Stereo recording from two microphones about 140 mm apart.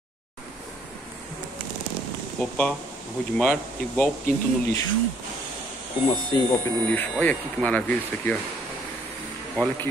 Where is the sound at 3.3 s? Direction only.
5° left (ahead or behind).